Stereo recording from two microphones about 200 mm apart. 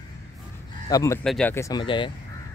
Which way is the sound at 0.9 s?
15° left (ahead or behind).